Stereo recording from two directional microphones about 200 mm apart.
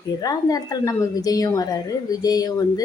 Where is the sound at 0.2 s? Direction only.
20° left (ahead or behind).